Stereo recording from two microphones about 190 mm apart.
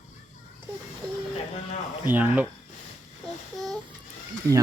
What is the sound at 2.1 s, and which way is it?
Speech, 10° right (ahead or behind).